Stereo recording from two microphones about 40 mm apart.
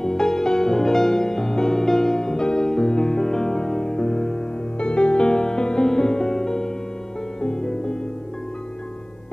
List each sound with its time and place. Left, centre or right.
0.0 s music: centre